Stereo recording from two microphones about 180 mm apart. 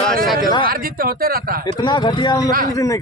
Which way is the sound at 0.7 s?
55° right (ahead or behind).